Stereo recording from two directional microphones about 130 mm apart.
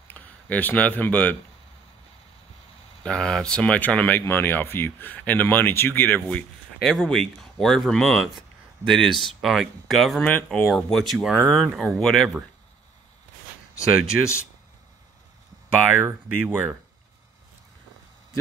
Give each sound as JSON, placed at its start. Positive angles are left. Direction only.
{"t": 0.1, "sound": "speech", "side_deg": 15}
{"t": 3.0, "sound": "speech", "side_deg": 5}
{"t": 10.2, "sound": "speech", "side_deg": 15}
{"t": 10.7, "sound": "speech", "side_deg": 0}
{"t": 14.1, "sound": "speech", "side_deg": -15}
{"t": 16.0, "sound": "speech", "side_deg": -15}